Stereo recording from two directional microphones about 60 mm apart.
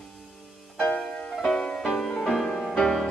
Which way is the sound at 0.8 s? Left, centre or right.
Left.